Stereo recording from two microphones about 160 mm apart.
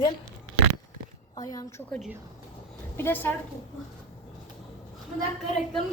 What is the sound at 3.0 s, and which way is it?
Speech, 15° left (ahead or behind).